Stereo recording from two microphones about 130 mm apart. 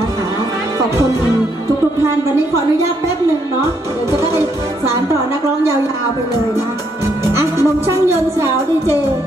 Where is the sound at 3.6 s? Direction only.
20° right (ahead or behind).